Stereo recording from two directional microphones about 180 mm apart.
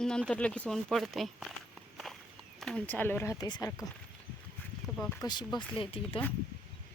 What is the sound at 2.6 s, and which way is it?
Speech, 5° left (ahead or behind).